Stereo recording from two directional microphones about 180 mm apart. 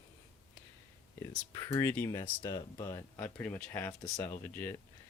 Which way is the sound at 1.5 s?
15° left (ahead or behind).